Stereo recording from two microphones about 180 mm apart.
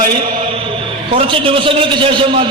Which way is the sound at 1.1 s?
30° right (ahead or behind).